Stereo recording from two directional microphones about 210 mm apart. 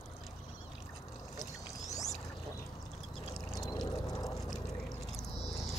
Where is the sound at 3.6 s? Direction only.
20° left (ahead or behind).